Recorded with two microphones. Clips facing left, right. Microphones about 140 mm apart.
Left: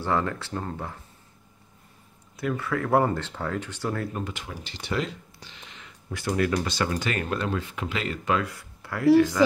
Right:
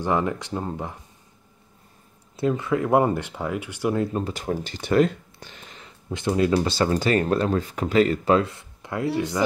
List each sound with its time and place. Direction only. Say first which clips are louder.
0.0 s speech: right 3 dB; 15° right (ahead or behind)
2.3 s speech: right 5 dB; 25° right (ahead or behind)
4.2 s speech: right 8 dB; 40° right (ahead or behind)
6.0 s speech: right 4 dB; 20° right (ahead or behind)